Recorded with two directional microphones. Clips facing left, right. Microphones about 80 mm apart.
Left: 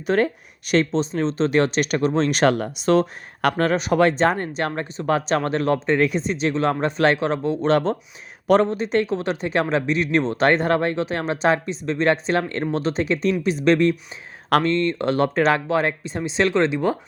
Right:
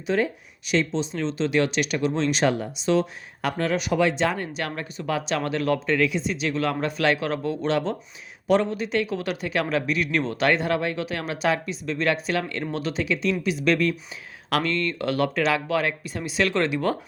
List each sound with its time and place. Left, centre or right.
0.1 s speech: left
6.0 s speech: left
7.7 s speech: left